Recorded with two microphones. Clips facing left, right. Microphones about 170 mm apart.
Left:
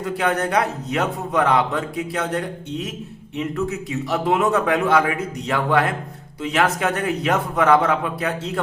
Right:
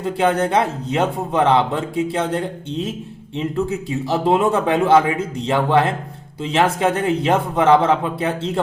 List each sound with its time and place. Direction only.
0.0 s a man's voice: 25° right (ahead or behind)